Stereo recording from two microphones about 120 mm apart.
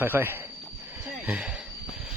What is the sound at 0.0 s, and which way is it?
Speech, 15° right (ahead or behind).